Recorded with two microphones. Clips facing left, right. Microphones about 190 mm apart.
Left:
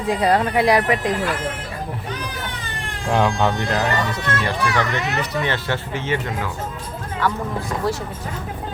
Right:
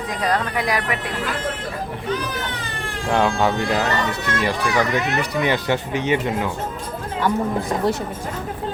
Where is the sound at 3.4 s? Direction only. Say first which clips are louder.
Right 1 dB; 5° right (ahead or behind).